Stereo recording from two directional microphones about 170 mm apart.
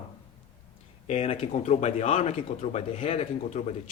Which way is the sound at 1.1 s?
40° left (ahead or behind).